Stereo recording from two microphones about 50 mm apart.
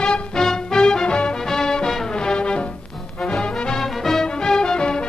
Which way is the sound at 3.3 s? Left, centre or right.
Centre.